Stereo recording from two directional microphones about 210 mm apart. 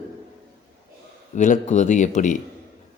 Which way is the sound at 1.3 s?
35° left (ahead or behind).